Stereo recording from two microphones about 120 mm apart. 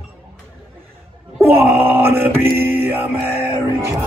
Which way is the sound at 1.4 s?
15° right (ahead or behind).